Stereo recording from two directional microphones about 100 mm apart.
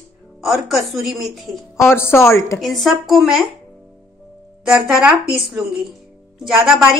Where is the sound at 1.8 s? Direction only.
25° left (ahead or behind).